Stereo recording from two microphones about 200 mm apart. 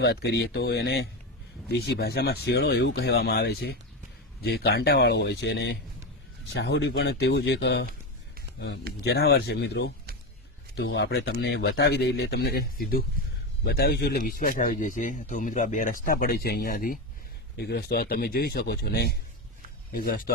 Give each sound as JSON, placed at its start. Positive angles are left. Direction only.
{"t": 0.0, "sound": "speech", "side_deg": 55}
{"t": 9.0, "sound": "speech", "side_deg": 55}